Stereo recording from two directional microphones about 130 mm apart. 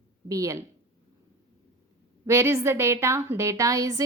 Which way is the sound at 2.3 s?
20° right (ahead or behind).